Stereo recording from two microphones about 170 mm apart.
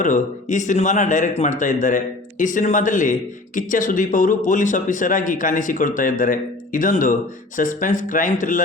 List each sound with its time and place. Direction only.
0.0 s a man's voice: 50° left (ahead or behind)